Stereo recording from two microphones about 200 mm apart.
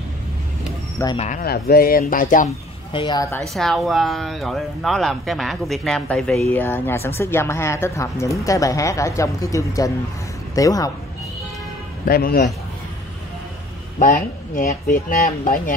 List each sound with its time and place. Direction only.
1.1 s speech: 35° left (ahead or behind)
1.4 s speech: 50° left (ahead or behind)
2.9 s speech: 20° left (ahead or behind)
3.5 s speech: centre (ahead or behind); by 10.9 s 15° left (ahead or behind)
12.1 s speech: 50° left (ahead or behind)
13.9 s speech: 45° left (ahead or behind)